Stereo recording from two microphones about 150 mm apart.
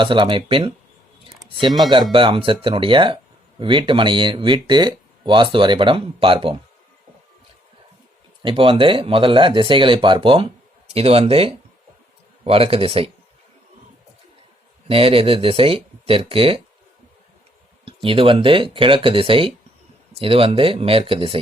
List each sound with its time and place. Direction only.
0.0 s speech: 35° right (ahead or behind)
2.1 s speech: 35° right (ahead or behind)
8.4 s speech: 35° right (ahead or behind)
14.8 s speech: 40° right (ahead or behind)
17.8 s speech: 35° right (ahead or behind)